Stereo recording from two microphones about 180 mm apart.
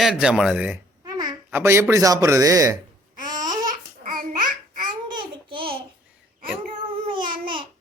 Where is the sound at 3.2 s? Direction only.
45° right (ahead or behind).